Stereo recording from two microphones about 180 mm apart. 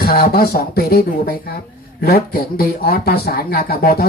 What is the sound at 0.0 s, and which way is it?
A man's voice, 55° left (ahead or behind).